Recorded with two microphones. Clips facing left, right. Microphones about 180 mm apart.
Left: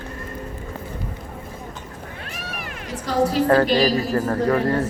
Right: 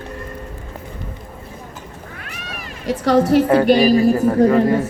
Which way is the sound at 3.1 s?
70° right (ahead or behind).